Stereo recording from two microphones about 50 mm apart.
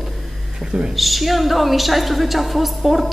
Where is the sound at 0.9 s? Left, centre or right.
Centre.